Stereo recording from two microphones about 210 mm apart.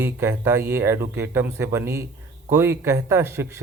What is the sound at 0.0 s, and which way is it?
Speech, 10° right (ahead or behind).